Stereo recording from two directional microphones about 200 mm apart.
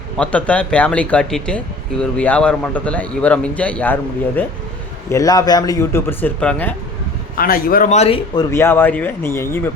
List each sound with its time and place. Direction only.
0.2 s speech: 5° left (ahead or behind)
5.0 s speech: 15° left (ahead or behind)
7.3 s a man's voice: 45° left (ahead or behind)
8.4 s speech: 15° left (ahead or behind)